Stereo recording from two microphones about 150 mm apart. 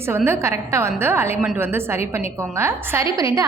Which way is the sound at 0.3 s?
20° right (ahead or behind).